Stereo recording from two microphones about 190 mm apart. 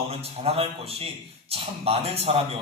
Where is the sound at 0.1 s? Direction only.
30° right (ahead or behind).